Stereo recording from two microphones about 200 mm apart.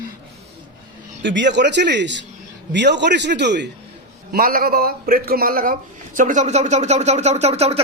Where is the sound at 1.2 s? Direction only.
65° right (ahead or behind).